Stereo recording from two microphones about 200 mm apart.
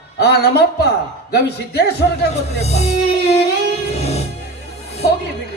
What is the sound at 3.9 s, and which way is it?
Music, 30° left (ahead or behind).